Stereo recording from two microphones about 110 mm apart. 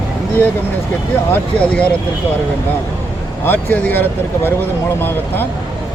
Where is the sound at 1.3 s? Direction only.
10° left (ahead or behind).